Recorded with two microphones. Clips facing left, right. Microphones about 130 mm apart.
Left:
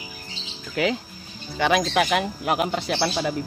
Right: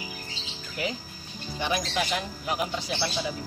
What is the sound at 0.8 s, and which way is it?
Speech, 75° left (ahead or behind).